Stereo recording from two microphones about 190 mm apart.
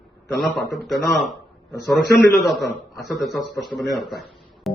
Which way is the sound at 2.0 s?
50° left (ahead or behind).